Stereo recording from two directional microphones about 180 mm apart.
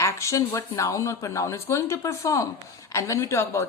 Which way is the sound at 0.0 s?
15° left (ahead or behind).